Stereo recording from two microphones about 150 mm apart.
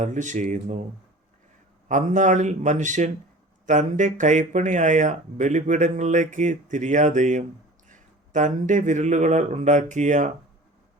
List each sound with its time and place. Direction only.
0.0 s a man's voice: 55° right (ahead or behind)
1.9 s a man's voice: 55° right (ahead or behind)